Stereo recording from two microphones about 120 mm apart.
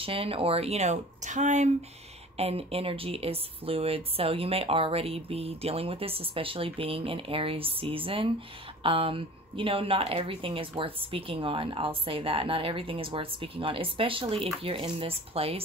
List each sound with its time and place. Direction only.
0.0 s speech: 50° right (ahead or behind); by 1.7 s 80° right
2.3 s speech: 55° right (ahead or behind)